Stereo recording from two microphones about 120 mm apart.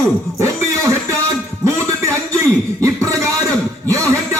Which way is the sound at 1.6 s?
25° right (ahead or behind).